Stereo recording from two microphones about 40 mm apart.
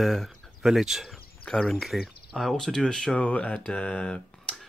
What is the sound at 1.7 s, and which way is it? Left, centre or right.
Speech, centre.